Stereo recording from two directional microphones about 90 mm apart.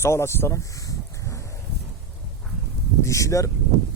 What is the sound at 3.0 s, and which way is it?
Speech, 35° left (ahead or behind).